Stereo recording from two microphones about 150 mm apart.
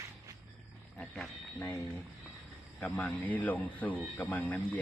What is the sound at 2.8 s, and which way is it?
Speech, 10° left (ahead or behind).